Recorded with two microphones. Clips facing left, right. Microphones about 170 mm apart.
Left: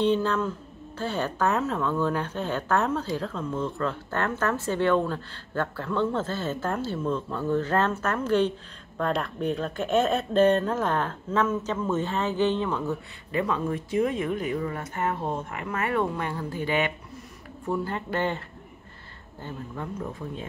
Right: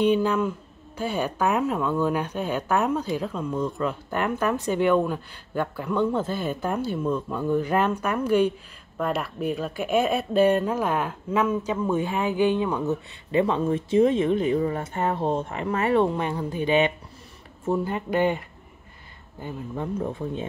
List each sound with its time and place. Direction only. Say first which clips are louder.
0.0 s speech: right 3 dB; 15° right (ahead or behind)
19.4 s speech: right 4 dB; 20° right (ahead or behind)